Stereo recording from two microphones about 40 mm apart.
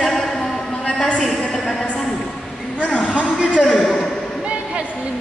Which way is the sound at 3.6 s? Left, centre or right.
Centre.